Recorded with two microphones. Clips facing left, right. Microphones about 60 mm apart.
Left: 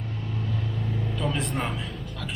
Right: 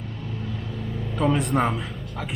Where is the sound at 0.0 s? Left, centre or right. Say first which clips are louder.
Even; centre.